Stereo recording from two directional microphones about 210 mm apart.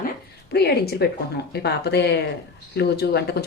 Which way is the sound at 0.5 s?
50° left (ahead or behind).